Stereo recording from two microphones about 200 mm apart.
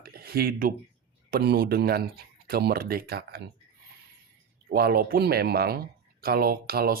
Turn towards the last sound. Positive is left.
turn(degrees=-50)  # may be behind; listen again after turning